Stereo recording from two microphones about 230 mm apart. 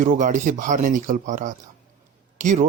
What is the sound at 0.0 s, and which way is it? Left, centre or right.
Speech, right.